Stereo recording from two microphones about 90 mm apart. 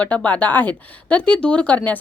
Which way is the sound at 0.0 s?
15° left (ahead or behind).